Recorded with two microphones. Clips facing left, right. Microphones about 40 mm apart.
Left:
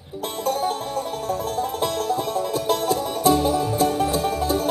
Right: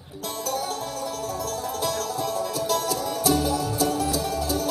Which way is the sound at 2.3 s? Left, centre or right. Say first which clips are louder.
Left 3 dB; left.